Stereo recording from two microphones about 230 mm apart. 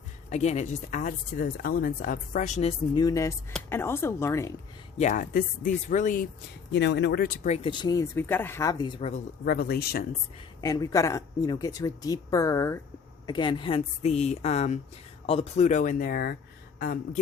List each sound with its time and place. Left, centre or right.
0.3 s speech: left; by 4.5 s centre
4.9 s speech: left
6.7 s speech: left
10.6 s speech: centre; by 17.2 s left